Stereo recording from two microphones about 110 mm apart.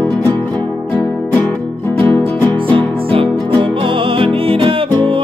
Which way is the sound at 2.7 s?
55° right (ahead or behind).